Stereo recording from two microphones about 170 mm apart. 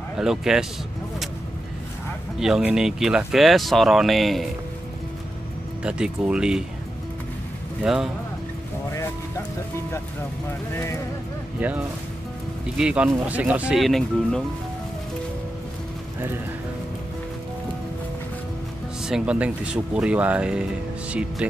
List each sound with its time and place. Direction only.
0.2 s speech: 5° right (ahead or behind)
2.4 s speech: 5° right (ahead or behind)
5.9 s speech: 5° right (ahead or behind)
7.8 s speech: 5° right (ahead or behind)
10.7 s speech: 15° left (ahead or behind)
11.6 s speech: 10° right (ahead or behind)
19.0 s speech: 5° right (ahead or behind)